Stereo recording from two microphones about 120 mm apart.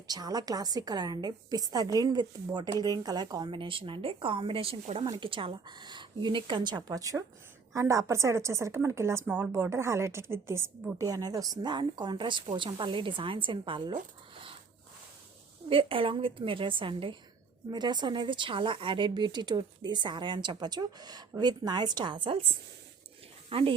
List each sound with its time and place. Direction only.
0.1 s speech: 35° right (ahead or behind); by 4.8 s 50° right (ahead or behind)
5.0 s a woman's voice: 40° right (ahead or behind)
15.7 s speech: 50° right (ahead or behind)